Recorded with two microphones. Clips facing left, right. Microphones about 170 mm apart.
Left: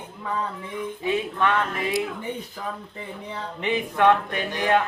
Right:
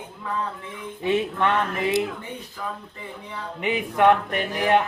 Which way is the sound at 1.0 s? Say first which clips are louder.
Right 2 dB; 25° right (ahead or behind).